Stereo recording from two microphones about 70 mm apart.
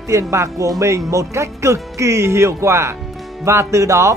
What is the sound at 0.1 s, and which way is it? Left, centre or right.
Speech, right.